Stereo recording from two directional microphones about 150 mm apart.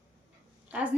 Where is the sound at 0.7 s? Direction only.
10° right (ahead or behind).